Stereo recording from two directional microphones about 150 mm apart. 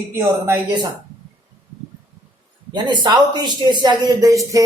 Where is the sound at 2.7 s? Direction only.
30° right (ahead or behind).